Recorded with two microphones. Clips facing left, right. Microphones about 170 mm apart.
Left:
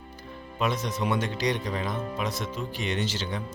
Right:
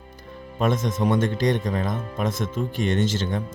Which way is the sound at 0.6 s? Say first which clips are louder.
Right 5 dB; 50° right (ahead or behind).